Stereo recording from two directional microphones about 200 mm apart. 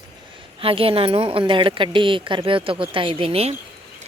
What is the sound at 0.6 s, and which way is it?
Speech, 25° right (ahead or behind).